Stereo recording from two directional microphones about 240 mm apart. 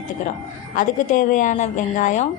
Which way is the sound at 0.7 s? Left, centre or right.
Left.